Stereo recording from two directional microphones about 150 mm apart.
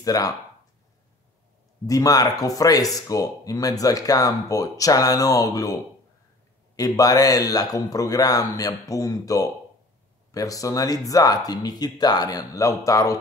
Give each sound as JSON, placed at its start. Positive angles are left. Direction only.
{"t": 0.0, "sound": "speech", "side_deg": 25}
{"t": 1.9, "sound": "speech", "side_deg": 25}
{"t": 6.8, "sound": "speech", "side_deg": 25}